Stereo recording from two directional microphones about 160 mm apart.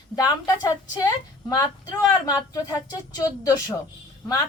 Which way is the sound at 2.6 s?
25° left (ahead or behind).